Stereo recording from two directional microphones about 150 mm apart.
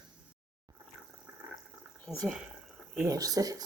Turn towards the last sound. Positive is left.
turn(degrees=-25)  # may be behind; listen again after turning